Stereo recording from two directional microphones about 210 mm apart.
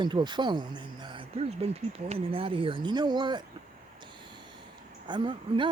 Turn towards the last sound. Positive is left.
turn(degrees=-25)  # may be behind; listen again after turning